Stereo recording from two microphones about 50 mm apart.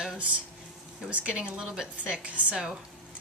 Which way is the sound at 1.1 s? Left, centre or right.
Right.